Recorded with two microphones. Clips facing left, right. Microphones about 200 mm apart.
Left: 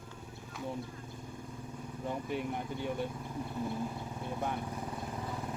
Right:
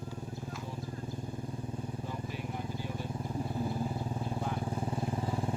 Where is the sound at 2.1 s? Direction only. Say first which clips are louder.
Left 4 dB; 60° left (ahead or behind).